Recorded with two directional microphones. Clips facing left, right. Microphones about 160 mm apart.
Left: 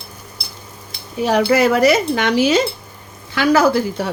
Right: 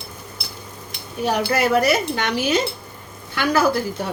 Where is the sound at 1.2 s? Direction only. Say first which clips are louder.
Left 6 dB; 90° left.